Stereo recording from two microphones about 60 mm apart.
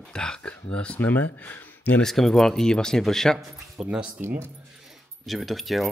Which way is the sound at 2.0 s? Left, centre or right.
Centre.